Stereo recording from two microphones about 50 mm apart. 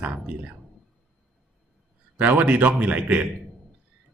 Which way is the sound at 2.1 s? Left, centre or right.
Right.